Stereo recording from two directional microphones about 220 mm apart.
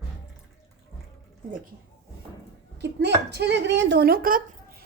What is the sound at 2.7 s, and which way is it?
Speech, 50° right (ahead or behind).